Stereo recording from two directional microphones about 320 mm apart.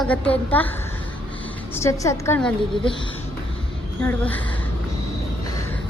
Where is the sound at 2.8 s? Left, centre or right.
Centre.